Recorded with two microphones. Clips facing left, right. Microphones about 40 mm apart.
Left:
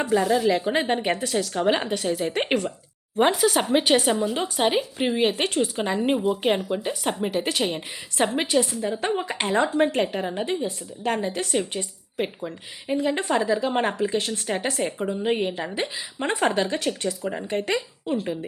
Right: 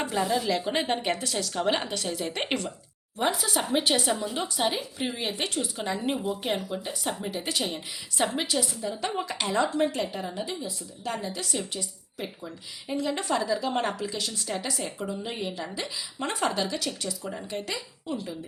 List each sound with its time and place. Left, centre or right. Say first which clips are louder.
0.1 s a woman's voice: left 8 dB; centre
3.2 s a woman's voice: left 7 dB; left
4.1 s a woman's voice: left 5 dB; left
7.3 s a woman's voice: left 7 dB; left